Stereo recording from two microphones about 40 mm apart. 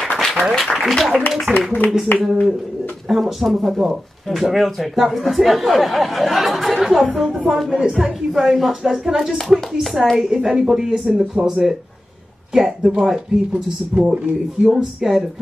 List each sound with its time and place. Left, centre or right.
0.2 s speech: centre
1.5 s speech: right
2.1 s speech: left
3.1 s speech: centre
7.5 s speech: centre
14.0 s speech: right
14.7 s speech: centre